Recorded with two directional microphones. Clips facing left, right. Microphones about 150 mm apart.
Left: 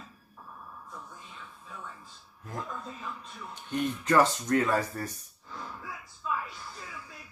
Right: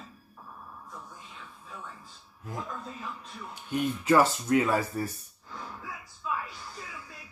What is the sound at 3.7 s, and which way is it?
Speech, 5° right (ahead or behind).